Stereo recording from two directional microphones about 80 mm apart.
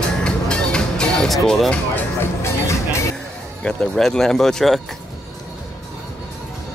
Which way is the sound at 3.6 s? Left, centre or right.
Centre.